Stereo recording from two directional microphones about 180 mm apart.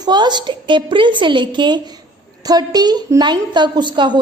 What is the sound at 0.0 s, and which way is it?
A woman's voice, 25° right (ahead or behind).